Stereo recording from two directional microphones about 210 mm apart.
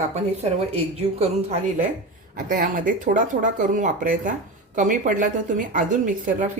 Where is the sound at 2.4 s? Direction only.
40° right (ahead or behind).